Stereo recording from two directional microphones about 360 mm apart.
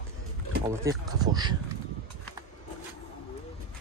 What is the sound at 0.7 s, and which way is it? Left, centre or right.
Speech, centre.